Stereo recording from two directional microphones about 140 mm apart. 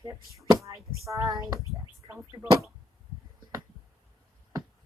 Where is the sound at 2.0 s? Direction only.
30° right (ahead or behind).